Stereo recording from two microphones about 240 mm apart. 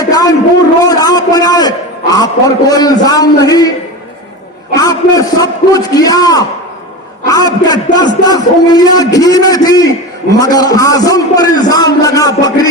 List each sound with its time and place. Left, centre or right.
0.0 s a sound: centre
0.9 s a man's voice: centre
4.7 s a man's voice: centre